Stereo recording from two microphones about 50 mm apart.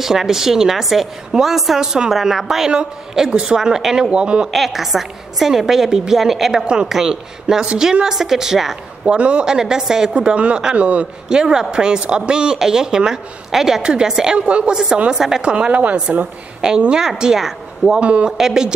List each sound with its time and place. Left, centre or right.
0.0 s a woman's voice: centre
4.5 s a woman's voice: centre
9.0 s a woman's voice: right
10.1 s a woman's voice: right
11.2 s a woman's voice: centre
15.5 s a woman's voice: right
16.6 s a woman's voice: centre
18.0 s a woman's voice: right
18.4 s a woman's voice: centre